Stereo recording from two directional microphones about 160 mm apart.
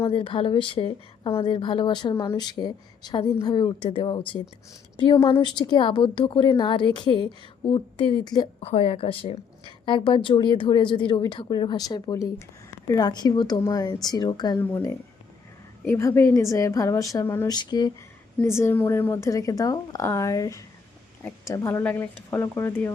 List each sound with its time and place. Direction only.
0.1 s a woman's voice: 35° left (ahead or behind); by 17.6 s 15° left (ahead or behind)
17.6 s a woman's voice: 25° left (ahead or behind)
18.4 s a woman's voice: 15° left (ahead or behind)